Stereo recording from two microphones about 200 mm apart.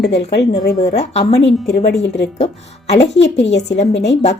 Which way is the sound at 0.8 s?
35° left (ahead or behind).